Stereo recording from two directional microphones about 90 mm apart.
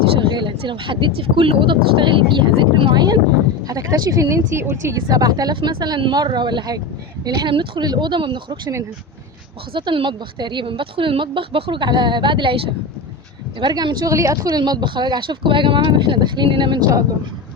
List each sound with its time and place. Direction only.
0.3 s speech: 60° right (ahead or behind)
3.7 s speech: 40° right (ahead or behind)
6.0 s speech: 65° right (ahead or behind); by 7.5 s 50° right (ahead or behind)
7.5 s speech: 70° right (ahead or behind)
7.9 s speech: 60° right (ahead or behind)
9.7 s speech: 65° right (ahead or behind)
13.6 s speech: 55° right (ahead or behind)